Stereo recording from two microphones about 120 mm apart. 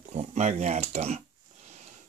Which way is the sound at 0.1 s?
70° right (ahead or behind).